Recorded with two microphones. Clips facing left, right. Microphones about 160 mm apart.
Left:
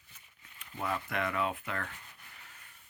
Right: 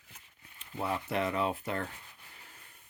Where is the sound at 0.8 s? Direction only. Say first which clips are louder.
Right 2 dB; 30° right (ahead or behind).